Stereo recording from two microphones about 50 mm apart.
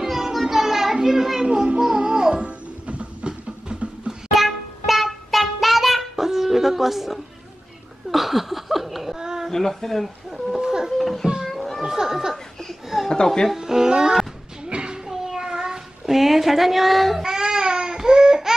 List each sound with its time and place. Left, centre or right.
0.0 s children playing: centre
1.5 s music: centre
2.4 s music: right
4.3 s a sound: centre
9.5 s speech: centre
10.6 s a sound: centre
11.0 s a sound: centre
11.4 s children playing: centre
11.8 s speech: centre
13.1 s speech: centre
13.6 s music: centre
14.7 s a sound: centre